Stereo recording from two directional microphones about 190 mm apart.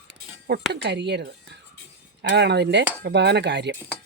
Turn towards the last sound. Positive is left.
turn(degrees=-65)  # may be behind; listen again after turning